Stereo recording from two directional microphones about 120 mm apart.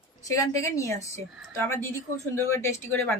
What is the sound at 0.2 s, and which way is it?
Speech, 25° left (ahead or behind).